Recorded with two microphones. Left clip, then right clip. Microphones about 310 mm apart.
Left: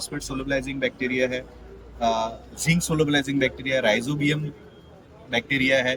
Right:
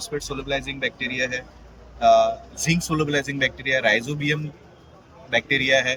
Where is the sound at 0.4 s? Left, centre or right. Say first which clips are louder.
Left 2 dB; centre.